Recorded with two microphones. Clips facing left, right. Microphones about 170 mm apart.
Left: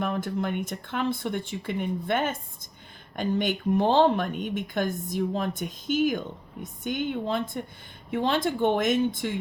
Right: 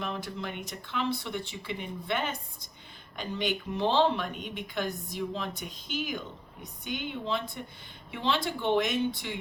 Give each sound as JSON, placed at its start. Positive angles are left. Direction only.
{"t": 0.0, "sound": "speech", "side_deg": 50}